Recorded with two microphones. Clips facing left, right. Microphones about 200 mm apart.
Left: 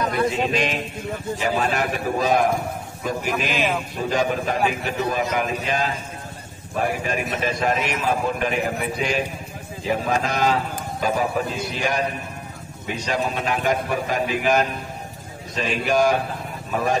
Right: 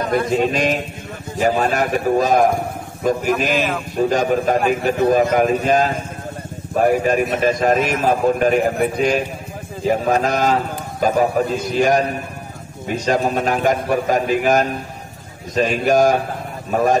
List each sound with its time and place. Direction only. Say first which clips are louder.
0.0 s a man's voice: right 4 dB; 45° right (ahead or behind)